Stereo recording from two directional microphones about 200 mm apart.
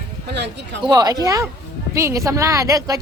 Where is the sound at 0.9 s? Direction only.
20° right (ahead or behind).